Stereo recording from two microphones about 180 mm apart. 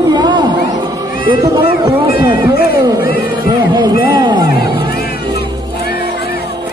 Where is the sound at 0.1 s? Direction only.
25° right (ahead or behind).